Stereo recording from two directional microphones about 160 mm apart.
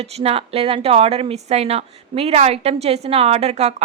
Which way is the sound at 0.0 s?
40° right (ahead or behind).